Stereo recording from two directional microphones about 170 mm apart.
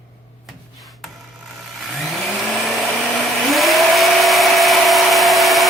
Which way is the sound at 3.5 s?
Centre (ahead or behind).